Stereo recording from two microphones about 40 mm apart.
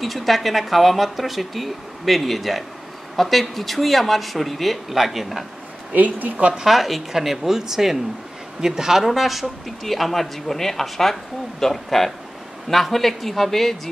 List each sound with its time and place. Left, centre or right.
0.0 s speech: centre
5.9 s speech: right
6.7 s speech: centre